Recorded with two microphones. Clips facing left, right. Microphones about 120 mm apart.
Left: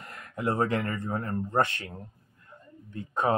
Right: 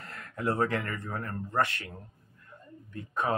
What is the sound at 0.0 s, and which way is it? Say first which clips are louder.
Speech: left 1 dB; 15° left (ahead or behind).